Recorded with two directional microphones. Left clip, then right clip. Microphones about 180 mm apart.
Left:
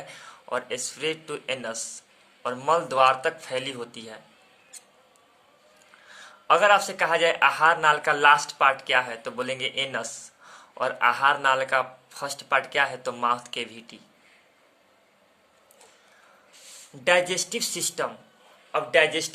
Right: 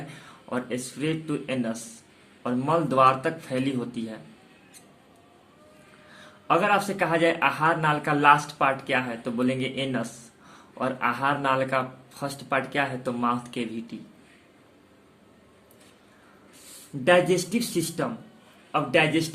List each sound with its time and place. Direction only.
0.1 s a man's voice: 35° left (ahead or behind)
6.1 s a man's voice: 35° left (ahead or behind)
17.0 s a man's voice: 40° left (ahead or behind)